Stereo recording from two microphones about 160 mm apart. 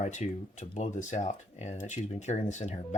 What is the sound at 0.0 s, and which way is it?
Speech, 50° left (ahead or behind).